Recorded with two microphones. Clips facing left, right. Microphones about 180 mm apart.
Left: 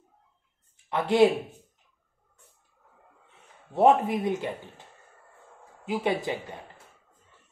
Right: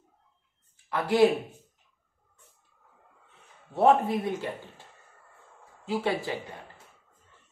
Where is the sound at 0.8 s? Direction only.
25° left (ahead or behind).